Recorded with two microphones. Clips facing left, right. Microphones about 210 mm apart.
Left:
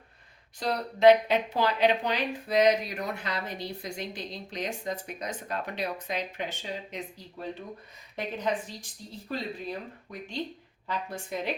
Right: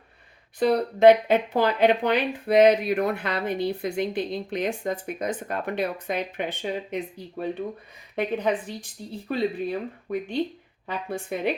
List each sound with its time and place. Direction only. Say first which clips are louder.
0.6 s speech: right 5 dB; 55° right (ahead or behind)
8.1 s speech: right 6 dB; 60° right (ahead or behind)